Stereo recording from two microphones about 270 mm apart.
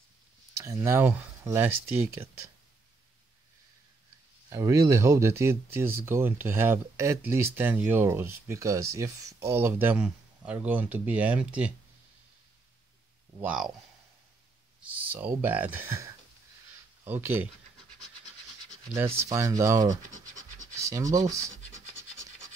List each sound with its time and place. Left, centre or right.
0.6 s speech: centre
4.5 s speech: centre
13.4 s speech: centre
14.8 s speech: centre
19.1 s speech: centre
20.1 s scratch: right
20.8 s speech: centre